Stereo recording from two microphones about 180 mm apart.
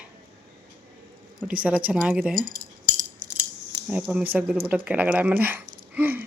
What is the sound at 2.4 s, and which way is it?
Cutlery, 50° right (ahead or behind).